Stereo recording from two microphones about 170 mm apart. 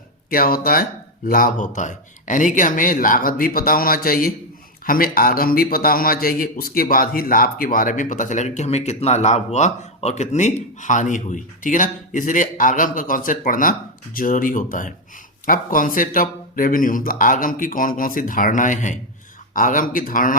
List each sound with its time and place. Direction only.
0.3 s a man's voice: 60° left (ahead or behind)